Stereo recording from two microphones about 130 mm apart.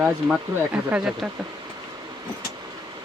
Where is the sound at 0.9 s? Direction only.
5° right (ahead or behind).